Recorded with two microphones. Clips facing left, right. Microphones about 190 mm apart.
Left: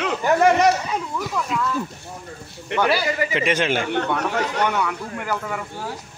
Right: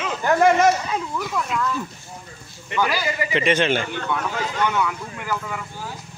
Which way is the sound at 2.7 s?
70° left (ahead or behind).